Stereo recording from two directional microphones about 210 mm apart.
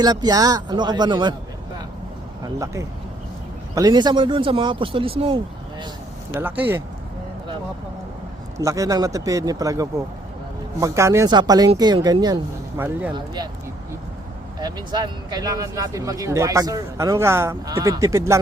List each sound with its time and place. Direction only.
0.0 s speech: 20° right (ahead or behind)
3.8 s speech: 20° right (ahead or behind)
6.3 s speech: 10° right (ahead or behind)
8.5 s speech: 15° right (ahead or behind)
13.1 s speech: 20° right (ahead or behind)
14.6 s speech: 20° right (ahead or behind)